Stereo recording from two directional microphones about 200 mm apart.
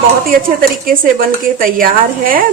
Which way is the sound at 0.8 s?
45° right (ahead or behind).